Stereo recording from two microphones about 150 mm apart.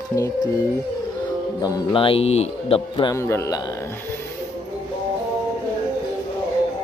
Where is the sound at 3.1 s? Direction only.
20° left (ahead or behind).